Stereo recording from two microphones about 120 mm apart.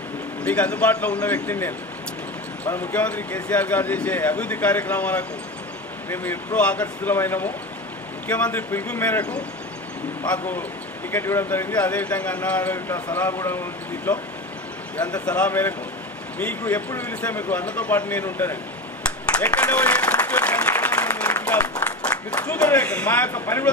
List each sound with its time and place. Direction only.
0.4 s speech: 10° left (ahead or behind)
10.2 s speech: 10° left (ahead or behind)
15.2 s speech: 10° left (ahead or behind)
19.3 s applause: 10° left (ahead or behind)
22.5 s speech: 15° left (ahead or behind)